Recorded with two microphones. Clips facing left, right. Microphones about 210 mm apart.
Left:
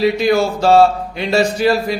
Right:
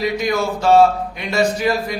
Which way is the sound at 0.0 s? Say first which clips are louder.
Left 5 dB; 30° left (ahead or behind).